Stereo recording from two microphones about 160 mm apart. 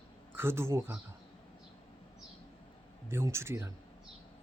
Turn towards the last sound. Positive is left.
turn(degrees=-15)  # may be behind; listen again after turning